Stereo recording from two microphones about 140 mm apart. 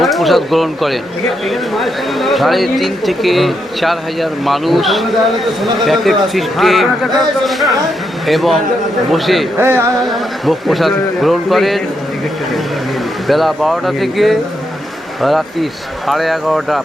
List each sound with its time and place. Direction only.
0.0 s speech: centre (ahead or behind)
9.6 s music: 15° right (ahead or behind)
10.1 s speech: centre (ahead or behind)
13.2 s speech: centre (ahead or behind)